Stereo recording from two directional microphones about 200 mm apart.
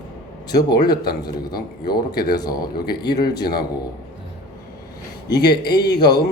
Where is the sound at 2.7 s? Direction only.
50° left (ahead or behind).